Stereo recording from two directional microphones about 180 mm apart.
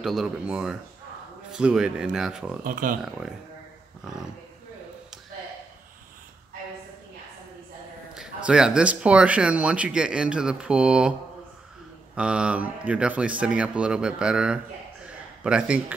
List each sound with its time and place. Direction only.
0.0 s speech: centre (ahead or behind)
2.6 s speech: 50° right (ahead or behind)
8.1 s speech: 5° right (ahead or behind)
12.2 s speech: 5° right (ahead or behind)